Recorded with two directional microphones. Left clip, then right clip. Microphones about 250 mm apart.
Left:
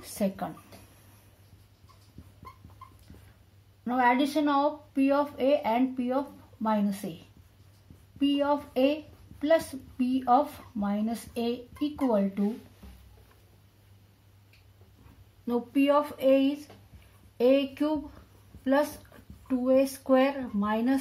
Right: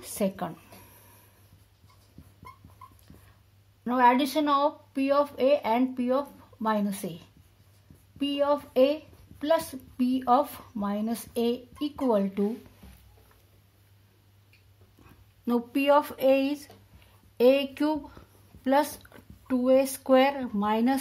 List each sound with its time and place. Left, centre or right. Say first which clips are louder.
0.0 s a sound: right 2 dB; right
3.8 s speech: right 3 dB; right
8.2 s speech: right 1 dB; right
15.4 s speech: right 1 dB; right